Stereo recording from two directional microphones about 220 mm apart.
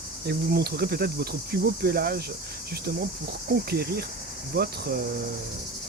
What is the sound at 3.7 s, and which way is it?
Speech, 45° right (ahead or behind).